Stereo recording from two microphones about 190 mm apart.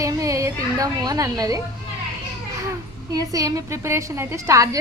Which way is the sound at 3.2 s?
20° right (ahead or behind).